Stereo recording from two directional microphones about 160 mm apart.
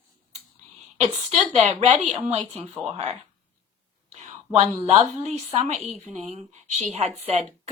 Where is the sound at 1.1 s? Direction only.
40° right (ahead or behind).